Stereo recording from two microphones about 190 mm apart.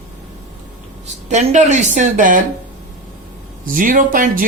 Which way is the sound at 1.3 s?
40° right (ahead or behind).